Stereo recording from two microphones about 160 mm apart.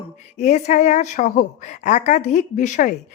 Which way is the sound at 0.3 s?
50° left (ahead or behind).